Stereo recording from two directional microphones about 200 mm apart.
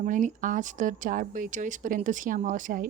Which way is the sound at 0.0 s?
40° right (ahead or behind).